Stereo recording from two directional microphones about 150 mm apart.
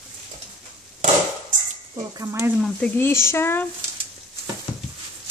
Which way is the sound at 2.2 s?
20° right (ahead or behind).